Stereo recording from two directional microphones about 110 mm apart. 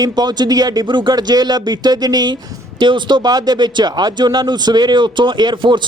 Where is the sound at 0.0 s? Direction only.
40° right (ahead or behind).